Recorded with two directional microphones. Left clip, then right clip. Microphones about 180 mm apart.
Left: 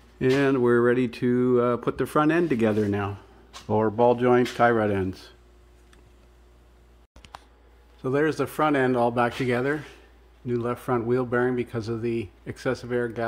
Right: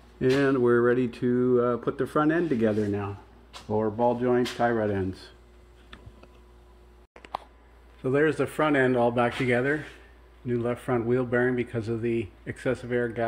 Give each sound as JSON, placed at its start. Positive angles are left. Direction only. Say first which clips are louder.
{"t": 0.2, "sound": "speech", "louder": "left 1 dB", "side_deg": 25}
{"t": 2.8, "sound": "a man's voice", "louder": "left 3 dB", "side_deg": 55}
{"t": 8.0, "sound": "speech", "louder": "even", "side_deg": 20}